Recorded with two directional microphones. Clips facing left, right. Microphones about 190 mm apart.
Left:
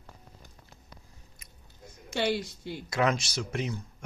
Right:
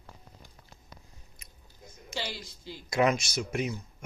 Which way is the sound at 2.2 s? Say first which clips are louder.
Left 9 dB; 65° left (ahead or behind).